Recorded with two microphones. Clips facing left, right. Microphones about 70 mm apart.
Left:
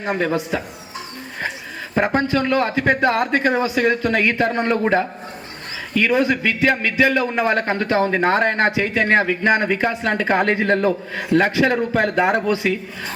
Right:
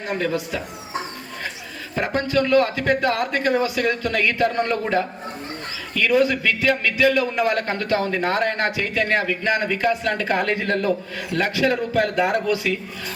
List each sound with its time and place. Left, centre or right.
0.0 s a man's voice: left
2.0 s a man's voice: left